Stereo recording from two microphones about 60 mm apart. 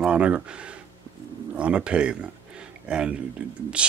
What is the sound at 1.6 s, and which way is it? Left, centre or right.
Speech, centre.